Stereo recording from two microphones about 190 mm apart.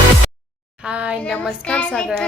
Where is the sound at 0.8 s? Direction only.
5° right (ahead or behind).